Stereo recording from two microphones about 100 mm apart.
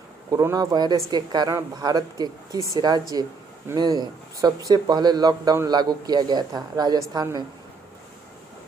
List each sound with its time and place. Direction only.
0.3 s speech: 35° right (ahead or behind)